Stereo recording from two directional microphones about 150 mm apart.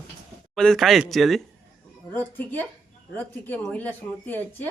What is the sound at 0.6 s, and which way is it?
Speech, 5° left (ahead or behind).